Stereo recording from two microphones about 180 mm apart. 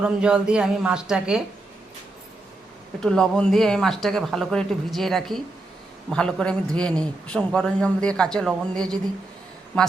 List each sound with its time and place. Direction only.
0.0 s speech: 5° right (ahead or behind)
3.0 s a woman's voice: 5° left (ahead or behind)